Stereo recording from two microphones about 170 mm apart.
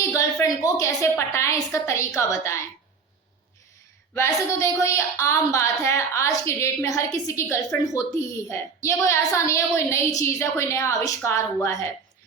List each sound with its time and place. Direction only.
0.0 s a woman's voice: 20° left (ahead or behind)
4.1 s a woman's voice: 15° left (ahead or behind)